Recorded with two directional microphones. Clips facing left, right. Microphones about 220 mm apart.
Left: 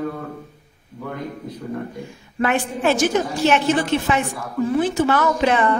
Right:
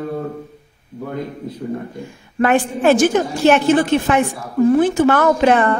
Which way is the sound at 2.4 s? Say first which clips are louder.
Right 5 dB; 50° right (ahead or behind).